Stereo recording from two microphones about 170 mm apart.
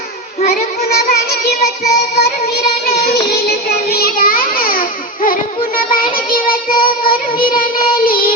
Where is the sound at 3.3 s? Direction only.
70° left (ahead or behind).